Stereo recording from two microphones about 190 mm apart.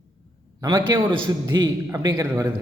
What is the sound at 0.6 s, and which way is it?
A man's voice, 20° right (ahead or behind).